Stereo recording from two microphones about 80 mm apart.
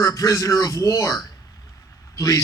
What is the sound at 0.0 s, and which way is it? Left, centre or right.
A man's voice, left.